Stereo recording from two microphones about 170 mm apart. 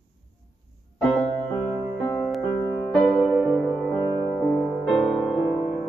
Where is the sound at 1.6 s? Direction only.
15° left (ahead or behind).